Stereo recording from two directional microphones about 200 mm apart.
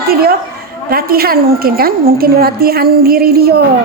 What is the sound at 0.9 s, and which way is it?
A woman's voice, 50° right (ahead or behind).